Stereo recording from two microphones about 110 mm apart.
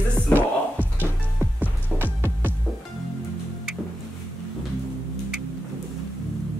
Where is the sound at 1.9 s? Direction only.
15° right (ahead or behind).